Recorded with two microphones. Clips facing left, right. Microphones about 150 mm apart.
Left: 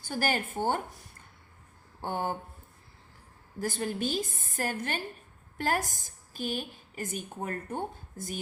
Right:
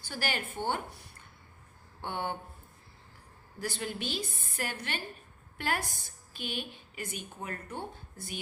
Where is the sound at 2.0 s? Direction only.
40° left (ahead or behind).